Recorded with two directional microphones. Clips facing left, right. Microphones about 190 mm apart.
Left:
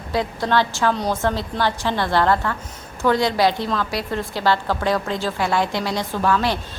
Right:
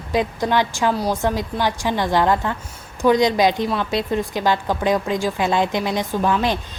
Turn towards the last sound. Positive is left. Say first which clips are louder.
# right 1 dB
turn(degrees=-20)  # may be behind; listen again after turning